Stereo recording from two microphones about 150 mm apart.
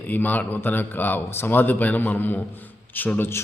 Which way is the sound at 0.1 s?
10° left (ahead or behind).